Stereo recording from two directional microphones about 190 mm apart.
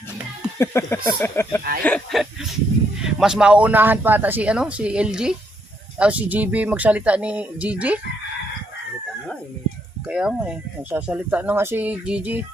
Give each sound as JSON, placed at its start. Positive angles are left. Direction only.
{"t": 0.6, "sound": "speech", "side_deg": 15}
{"t": 1.8, "sound": "speech", "side_deg": 5}
{"t": 10.1, "sound": "speech", "side_deg": -5}